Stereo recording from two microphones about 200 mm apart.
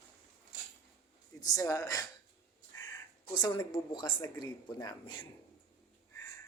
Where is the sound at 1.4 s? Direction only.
20° left (ahead or behind).